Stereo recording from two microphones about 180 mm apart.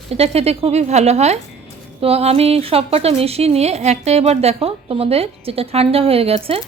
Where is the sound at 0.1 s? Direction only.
35° right (ahead or behind).